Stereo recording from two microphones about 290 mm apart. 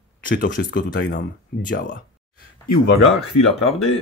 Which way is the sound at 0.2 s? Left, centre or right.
Left.